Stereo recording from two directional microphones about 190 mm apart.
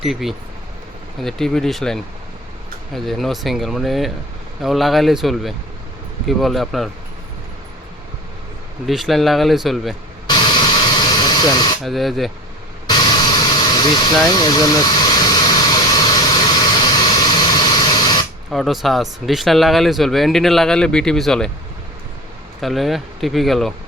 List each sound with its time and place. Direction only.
0.0 s speech: centre (ahead or behind)
8.9 s speech: centre (ahead or behind)
10.2 s hiss: 20° left (ahead or behind)
11.8 s speech: centre (ahead or behind)
12.9 s vehicle: 20° left (ahead or behind)
18.5 s speech: centre (ahead or behind)
22.6 s speech: centre (ahead or behind)